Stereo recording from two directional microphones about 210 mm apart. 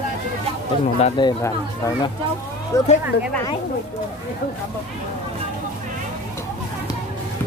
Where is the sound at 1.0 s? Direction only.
20° left (ahead or behind).